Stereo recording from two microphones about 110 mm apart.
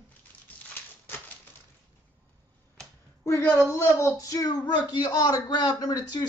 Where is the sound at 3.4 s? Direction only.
20° left (ahead or behind); by 6.3 s 35° left (ahead or behind).